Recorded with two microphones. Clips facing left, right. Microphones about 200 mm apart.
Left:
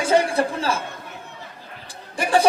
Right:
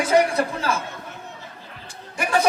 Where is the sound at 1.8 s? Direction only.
30° left (ahead or behind).